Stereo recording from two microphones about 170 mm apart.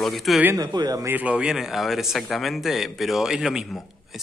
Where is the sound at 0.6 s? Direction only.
25° right (ahead or behind).